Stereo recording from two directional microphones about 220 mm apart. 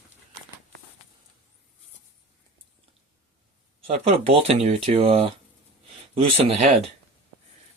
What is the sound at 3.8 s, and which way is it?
Speech, 25° right (ahead or behind).